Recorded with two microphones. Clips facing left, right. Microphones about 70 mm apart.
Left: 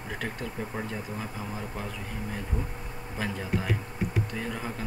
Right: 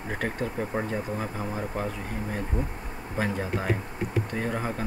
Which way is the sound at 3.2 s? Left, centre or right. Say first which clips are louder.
Right 3 dB; right.